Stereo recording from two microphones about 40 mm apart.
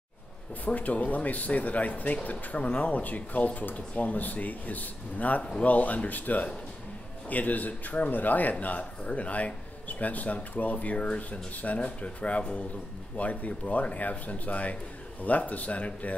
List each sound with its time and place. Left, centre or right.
0.7 s a man's voice: left